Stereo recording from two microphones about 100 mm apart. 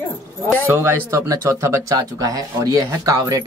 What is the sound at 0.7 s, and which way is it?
Speech, 25° right (ahead or behind).